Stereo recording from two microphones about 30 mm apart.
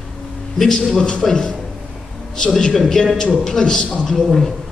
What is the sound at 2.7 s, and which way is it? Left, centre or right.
A man's voice, centre.